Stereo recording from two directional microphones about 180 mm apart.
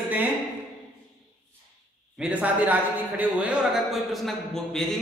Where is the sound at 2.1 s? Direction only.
5° right (ahead or behind).